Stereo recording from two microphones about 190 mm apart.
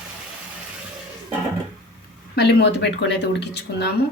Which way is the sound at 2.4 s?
60° left (ahead or behind).